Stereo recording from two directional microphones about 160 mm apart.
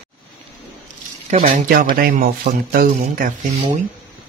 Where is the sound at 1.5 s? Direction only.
60° right (ahead or behind).